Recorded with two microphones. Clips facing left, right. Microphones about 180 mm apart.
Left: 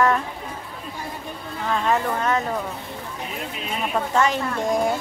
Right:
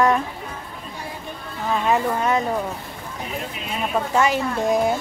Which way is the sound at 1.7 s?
10° right (ahead or behind).